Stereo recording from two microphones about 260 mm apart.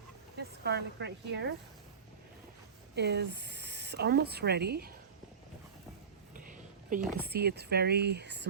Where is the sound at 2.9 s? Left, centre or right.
Right.